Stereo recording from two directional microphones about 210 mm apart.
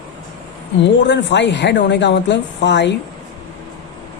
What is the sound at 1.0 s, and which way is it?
A woman's voice, 55° left (ahead or behind).